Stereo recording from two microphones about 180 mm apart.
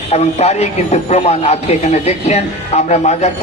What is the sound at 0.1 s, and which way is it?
A man's voice, 35° left (ahead or behind).